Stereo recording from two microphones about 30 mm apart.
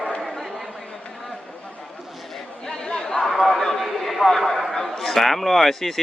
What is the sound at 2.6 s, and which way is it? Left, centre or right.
Chatter, left.